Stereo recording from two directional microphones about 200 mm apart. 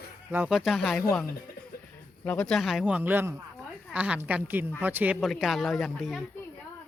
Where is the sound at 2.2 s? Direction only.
5° left (ahead or behind).